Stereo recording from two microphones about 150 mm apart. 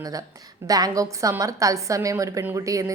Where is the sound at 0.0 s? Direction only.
25° right (ahead or behind).